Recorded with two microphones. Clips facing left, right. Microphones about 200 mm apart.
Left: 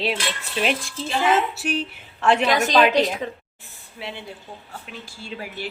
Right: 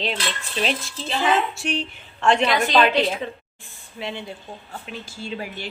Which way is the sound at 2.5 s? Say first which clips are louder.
Left 1 dB; 45° left (ahead or behind).